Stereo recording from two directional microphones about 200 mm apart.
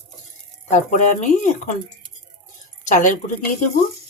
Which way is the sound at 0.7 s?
40° left (ahead or behind).